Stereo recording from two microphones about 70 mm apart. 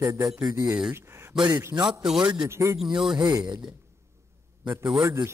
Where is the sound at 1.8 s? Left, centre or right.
Centre.